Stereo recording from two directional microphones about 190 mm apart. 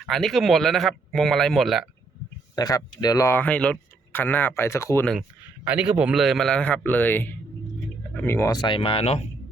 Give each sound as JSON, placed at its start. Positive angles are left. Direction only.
{"t": 0.0, "sound": "speech", "side_deg": 0}
{"t": 2.6, "sound": "speech", "side_deg": 20}
{"t": 5.6, "sound": "speech", "side_deg": -5}